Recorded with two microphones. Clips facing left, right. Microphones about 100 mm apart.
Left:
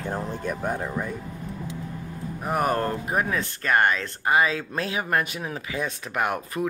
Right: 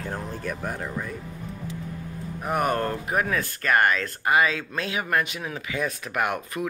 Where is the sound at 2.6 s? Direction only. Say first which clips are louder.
Left 1 dB; 30° left (ahead or behind).